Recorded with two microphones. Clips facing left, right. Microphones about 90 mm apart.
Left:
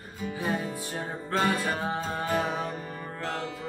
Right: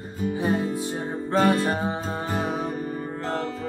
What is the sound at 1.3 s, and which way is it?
Music, 35° right (ahead or behind).